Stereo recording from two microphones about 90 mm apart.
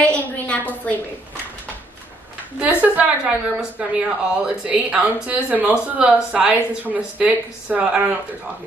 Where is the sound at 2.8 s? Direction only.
15° right (ahead or behind).